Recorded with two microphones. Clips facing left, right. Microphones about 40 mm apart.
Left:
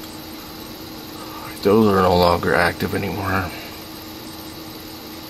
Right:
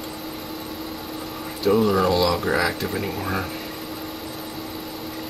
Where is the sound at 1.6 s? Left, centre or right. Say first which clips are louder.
Left 4 dB; centre.